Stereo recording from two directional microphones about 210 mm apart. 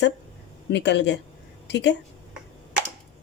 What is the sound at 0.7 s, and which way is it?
A woman's voice, 55° left (ahead or behind).